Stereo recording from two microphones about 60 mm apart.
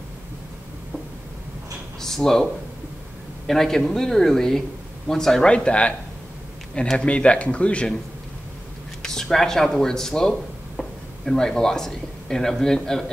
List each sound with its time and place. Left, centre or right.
2.0 s speech: centre
3.4 s speech: centre
7.0 s speech: centre
9.0 s speech: centre